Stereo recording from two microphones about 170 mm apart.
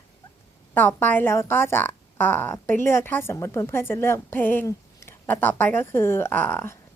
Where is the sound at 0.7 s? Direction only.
10° left (ahead or behind).